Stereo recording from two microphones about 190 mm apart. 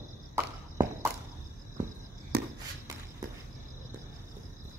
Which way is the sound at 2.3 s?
55° right (ahead or behind).